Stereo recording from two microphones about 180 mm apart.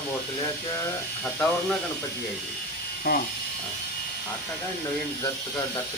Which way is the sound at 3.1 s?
55° left (ahead or behind).